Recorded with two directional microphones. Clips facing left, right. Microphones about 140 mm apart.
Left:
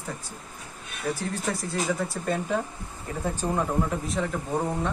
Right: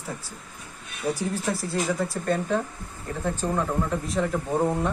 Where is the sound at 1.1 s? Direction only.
10° right (ahead or behind).